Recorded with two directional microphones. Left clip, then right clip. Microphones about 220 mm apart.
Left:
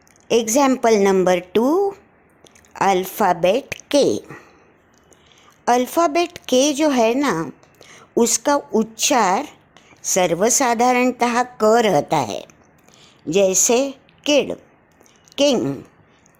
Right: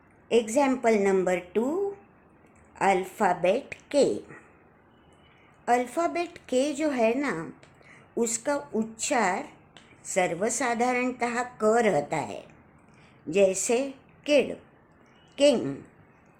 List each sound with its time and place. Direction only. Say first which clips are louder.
0.3 s speech: left 7 dB; 40° left (ahead or behind)
5.6 s speech: left 8 dB; 35° left (ahead or behind)